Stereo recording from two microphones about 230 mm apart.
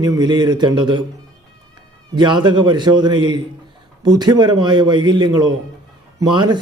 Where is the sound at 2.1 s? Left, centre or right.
Centre.